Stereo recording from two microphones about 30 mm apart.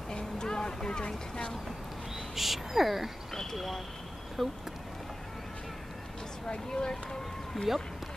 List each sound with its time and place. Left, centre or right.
0.1 s vehicle: left
2.3 s speech: centre
6.5 s speech: left
6.9 s a sound: centre